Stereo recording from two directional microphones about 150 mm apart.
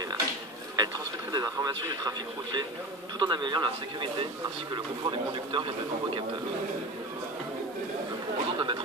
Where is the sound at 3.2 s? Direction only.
30° right (ahead or behind).